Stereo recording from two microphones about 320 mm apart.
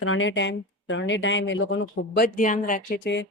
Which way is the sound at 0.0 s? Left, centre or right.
Left.